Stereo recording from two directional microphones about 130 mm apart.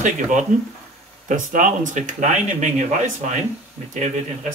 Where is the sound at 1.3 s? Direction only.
80° right; by 3.4 s 65° right (ahead or behind).